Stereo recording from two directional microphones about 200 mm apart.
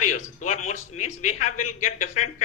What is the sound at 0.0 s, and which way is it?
A man's voice, 35° left (ahead or behind).